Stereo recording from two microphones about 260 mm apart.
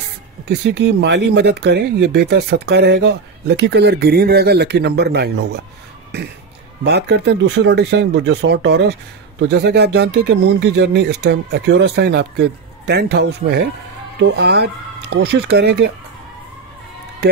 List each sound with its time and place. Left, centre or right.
0.5 s speech: right
6.8 s speech: right